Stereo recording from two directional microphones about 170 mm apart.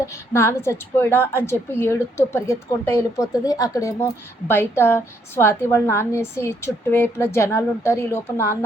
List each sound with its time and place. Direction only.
0.0 s a woman's voice: 15° left (ahead or behind)